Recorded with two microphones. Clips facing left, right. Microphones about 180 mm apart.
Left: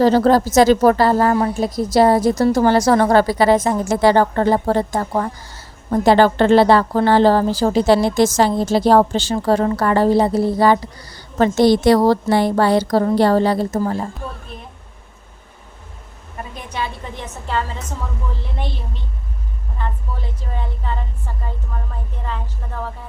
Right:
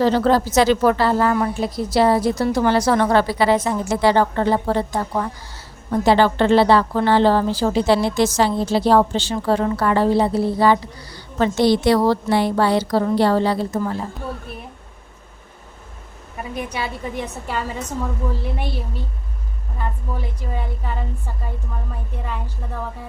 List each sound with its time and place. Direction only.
0.0 s a woman's voice: 40° left (ahead or behind)
16.4 s a woman's voice: 10° right (ahead or behind)
20.5 s a sound: 10° right (ahead or behind)